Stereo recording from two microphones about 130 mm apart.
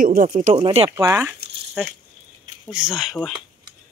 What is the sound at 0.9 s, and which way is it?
Speech, 20° right (ahead or behind).